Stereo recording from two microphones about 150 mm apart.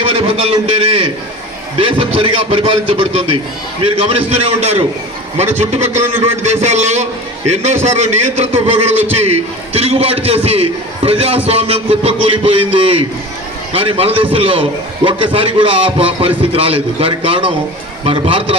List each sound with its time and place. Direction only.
0.0 s a man's voice: 40° right (ahead or behind)